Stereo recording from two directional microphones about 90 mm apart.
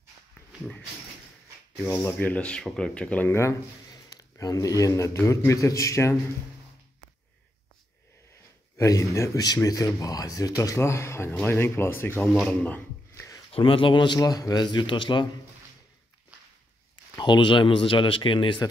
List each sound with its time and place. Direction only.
2.1 s speech: 15° left (ahead or behind)
3.3 s speech: 30° left (ahead or behind)
3.9 s a sound: 45° left (ahead or behind)
5.1 s speech: 30° left (ahead or behind)
8.7 s speech: 35° left (ahead or behind); by 12.8 s 15° left (ahead or behind)
13.1 s a sound: 35° left (ahead or behind)
13.5 s a man's voice: 80° left; by 15.2 s 60° left (ahead or behind)
17.2 s speech: 60° left (ahead or behind)